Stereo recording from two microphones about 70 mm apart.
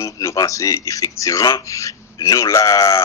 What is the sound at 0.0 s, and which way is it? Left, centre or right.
A man's voice, left.